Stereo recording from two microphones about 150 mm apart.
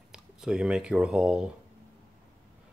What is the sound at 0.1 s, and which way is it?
Speech, 5° right (ahead or behind).